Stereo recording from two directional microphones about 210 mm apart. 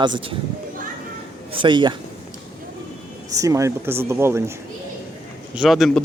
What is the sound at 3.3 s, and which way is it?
Speech, 15° right (ahead or behind).